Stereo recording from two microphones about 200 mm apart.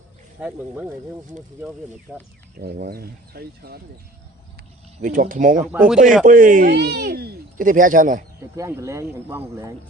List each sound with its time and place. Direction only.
0.3 s speech: 5° right (ahead or behind)
2.1 s speech: centre (ahead or behind)
2.6 s speech: 50° right (ahead or behind)
4.9 s speech: 40° right (ahead or behind)
5.6 s speech: 5° right (ahead or behind)
6.2 s speech: 40° right (ahead or behind)
6.7 s speech: 55° right (ahead or behind)
8.5 s speech: 15° right (ahead or behind)